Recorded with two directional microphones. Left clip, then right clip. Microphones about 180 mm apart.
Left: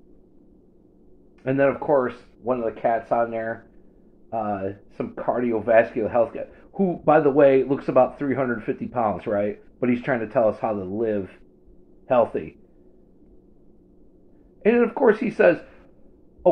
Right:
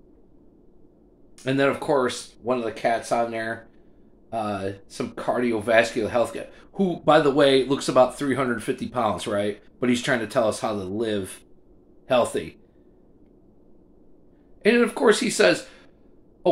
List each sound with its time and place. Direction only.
1.4 s speech: 35° right (ahead or behind)
14.6 s speech: 35° right (ahead or behind)